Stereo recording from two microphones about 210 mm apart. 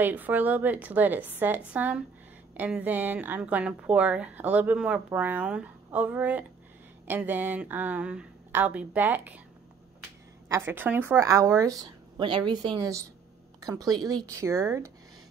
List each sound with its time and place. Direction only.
0.0 s a woman's voice: 10° right (ahead or behind)
10.5 s a woman's voice: 10° right (ahead or behind)